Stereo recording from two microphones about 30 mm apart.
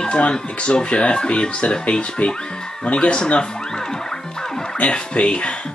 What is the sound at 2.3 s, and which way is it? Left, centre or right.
Speech, left.